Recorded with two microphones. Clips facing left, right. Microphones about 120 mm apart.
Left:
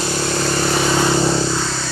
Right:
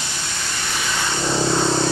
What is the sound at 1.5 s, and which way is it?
Vehicle, 20° right (ahead or behind).